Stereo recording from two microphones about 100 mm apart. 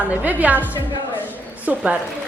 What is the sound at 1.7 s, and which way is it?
Speech, 10° right (ahead or behind).